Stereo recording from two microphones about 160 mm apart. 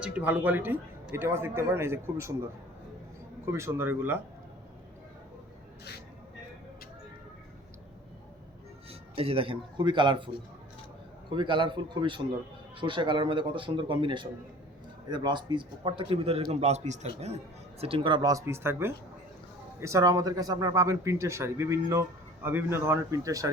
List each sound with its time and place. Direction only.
0.0 s speech: 10° right (ahead or behind)
8.9 s speech: 35° right (ahead or behind)
11.3 s speech: 30° right (ahead or behind)